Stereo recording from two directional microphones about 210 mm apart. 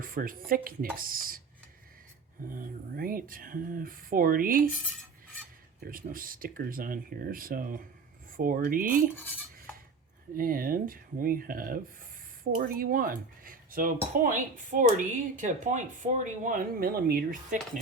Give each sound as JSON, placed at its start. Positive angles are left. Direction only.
{"t": 0.0, "sound": "speech", "side_deg": -40}
{"t": 2.5, "sound": "speech", "side_deg": -45}
{"t": 5.8, "sound": "speech", "side_deg": -45}
{"t": 10.3, "sound": "speech", "side_deg": -40}